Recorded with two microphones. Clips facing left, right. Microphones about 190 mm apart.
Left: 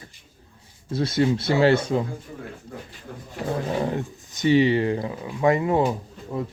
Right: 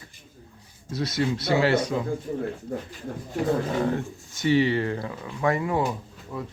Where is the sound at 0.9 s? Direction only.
25° left (ahead or behind).